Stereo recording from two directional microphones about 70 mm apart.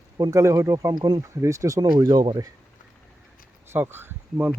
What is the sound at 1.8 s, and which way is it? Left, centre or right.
Speech, right.